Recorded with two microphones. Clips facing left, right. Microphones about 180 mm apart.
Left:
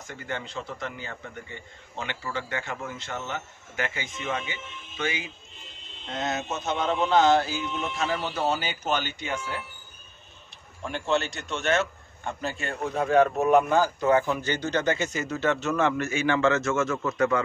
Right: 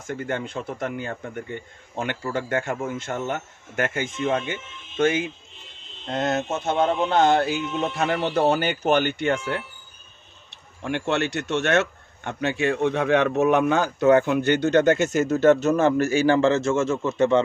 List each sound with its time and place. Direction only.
0.0 s a man's voice: 50° right (ahead or behind); by 17.4 s 25° right (ahead or behind)